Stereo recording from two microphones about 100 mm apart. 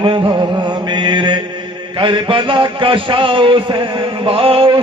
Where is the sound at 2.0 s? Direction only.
55° right (ahead or behind).